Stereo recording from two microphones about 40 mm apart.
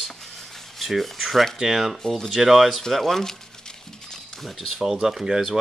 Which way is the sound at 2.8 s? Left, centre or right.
Centre.